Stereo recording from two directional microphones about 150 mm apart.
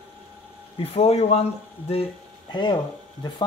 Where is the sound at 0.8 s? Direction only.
40° left (ahead or behind).